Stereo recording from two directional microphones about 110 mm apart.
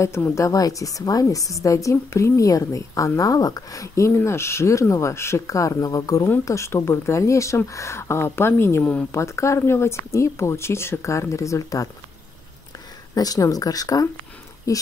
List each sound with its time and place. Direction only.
0.0 s a woman's voice: 25° left (ahead or behind)
13.1 s speech: 35° left (ahead or behind)